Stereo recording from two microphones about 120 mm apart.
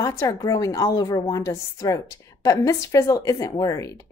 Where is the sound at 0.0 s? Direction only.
25° left (ahead or behind).